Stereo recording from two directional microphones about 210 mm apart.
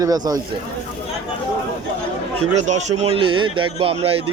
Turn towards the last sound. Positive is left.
turn(degrees=-25)  # may be behind; listen again after turning